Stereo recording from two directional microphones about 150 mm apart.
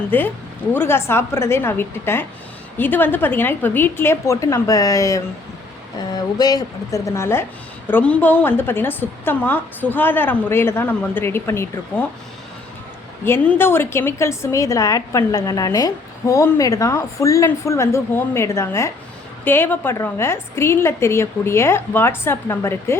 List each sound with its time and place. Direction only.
0.1 s a woman's voice: 15° left (ahead or behind)
6.3 s a woman's voice: 25° left (ahead or behind)
13.2 s a woman's voice: 15° left (ahead or behind)